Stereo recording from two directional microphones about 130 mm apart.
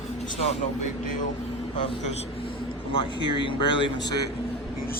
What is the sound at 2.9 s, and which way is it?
Speech, 40° left (ahead or behind).